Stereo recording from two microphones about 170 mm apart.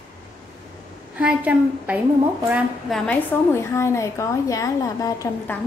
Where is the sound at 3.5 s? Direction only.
15° left (ahead or behind).